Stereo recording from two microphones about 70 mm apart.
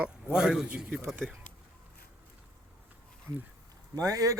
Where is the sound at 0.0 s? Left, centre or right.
Centre.